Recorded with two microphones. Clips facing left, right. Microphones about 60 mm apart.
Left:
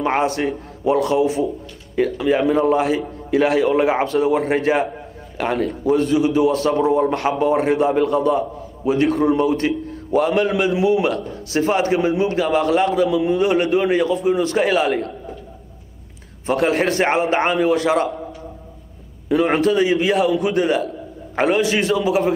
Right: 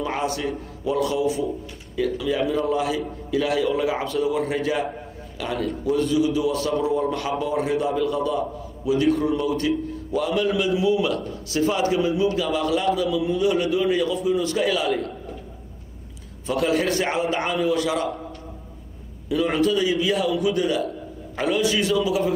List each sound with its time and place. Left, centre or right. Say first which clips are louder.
0.0 s a man's voice: left 6 dB; left
16.4 s a man's voice: left 4 dB; left
19.2 s a man's voice: left 4 dB; left